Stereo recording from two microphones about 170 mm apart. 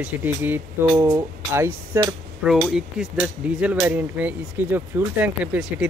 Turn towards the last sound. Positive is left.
turn(degrees=-10)  # may be behind; listen again after turning